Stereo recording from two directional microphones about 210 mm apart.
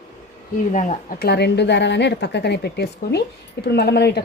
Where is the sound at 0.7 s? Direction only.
35° left (ahead or behind).